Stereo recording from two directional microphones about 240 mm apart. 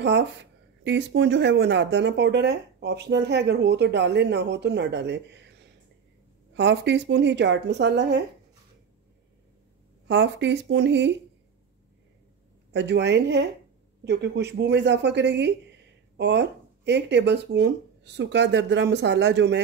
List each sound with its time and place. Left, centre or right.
0.0 s speech: right
6.5 s speech: right
10.0 s speech: right
12.7 s speech: right